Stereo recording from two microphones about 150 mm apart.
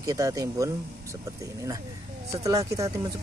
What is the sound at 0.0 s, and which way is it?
Speech, 20° right (ahead or behind).